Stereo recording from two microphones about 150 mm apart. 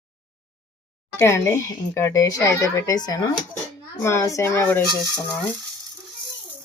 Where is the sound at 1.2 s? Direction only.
20° left (ahead or behind).